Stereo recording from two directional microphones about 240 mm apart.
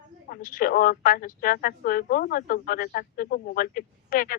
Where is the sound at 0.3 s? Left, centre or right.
Left.